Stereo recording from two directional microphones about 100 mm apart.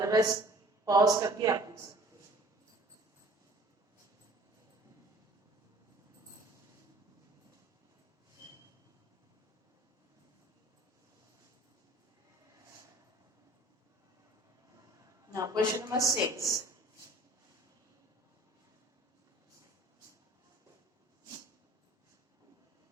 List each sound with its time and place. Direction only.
0.0 s speech: 35° right (ahead or behind)
15.3 s a woman's voice: 35° right (ahead or behind)